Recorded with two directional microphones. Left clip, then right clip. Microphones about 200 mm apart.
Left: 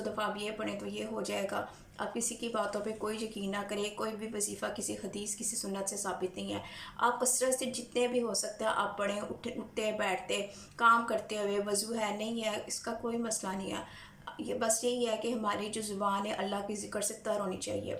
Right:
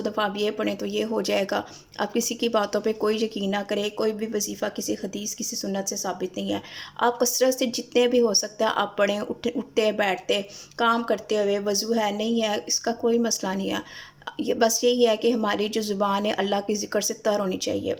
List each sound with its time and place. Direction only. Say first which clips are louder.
0.0 s speech: right 10 dB; 45° right (ahead or behind)